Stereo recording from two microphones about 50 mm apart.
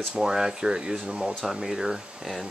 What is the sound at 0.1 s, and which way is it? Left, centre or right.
Speech, centre.